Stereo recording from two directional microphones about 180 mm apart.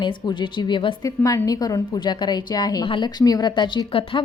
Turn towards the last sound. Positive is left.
turn(degrees=25)  # may be behind; listen again after turning